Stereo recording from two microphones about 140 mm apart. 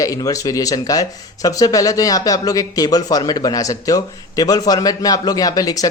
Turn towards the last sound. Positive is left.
turn(degrees=25)  # may be behind; listen again after turning